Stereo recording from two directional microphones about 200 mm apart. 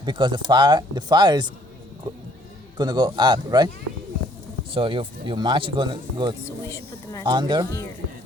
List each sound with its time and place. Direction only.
0.0 s speech: 20° right (ahead or behind)
2.7 s speech: 20° right (ahead or behind)
4.7 s speech: 25° right (ahead or behind)
6.7 s speech: 15° left (ahead or behind)
7.3 s speech: 25° right (ahead or behind)